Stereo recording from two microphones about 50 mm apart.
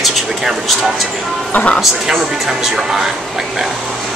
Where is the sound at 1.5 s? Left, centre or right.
Left.